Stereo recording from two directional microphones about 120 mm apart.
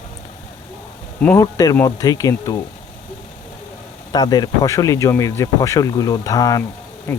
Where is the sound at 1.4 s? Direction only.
30° left (ahead or behind).